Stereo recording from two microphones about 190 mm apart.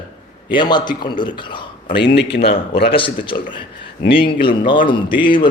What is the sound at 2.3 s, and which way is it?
Speech, 60° left (ahead or behind).